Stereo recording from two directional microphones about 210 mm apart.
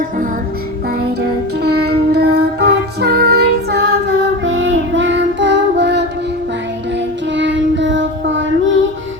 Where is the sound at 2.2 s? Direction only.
50° right (ahead or behind).